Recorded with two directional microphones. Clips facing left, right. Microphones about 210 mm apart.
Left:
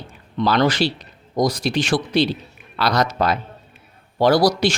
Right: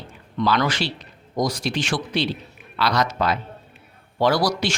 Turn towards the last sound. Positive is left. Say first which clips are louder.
# left 5 dB
turn(degrees=35)  # may be behind; listen again after turning